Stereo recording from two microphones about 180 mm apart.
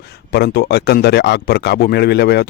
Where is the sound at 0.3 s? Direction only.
65° left (ahead or behind).